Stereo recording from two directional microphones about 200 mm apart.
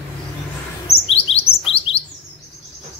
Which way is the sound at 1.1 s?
30° left (ahead or behind).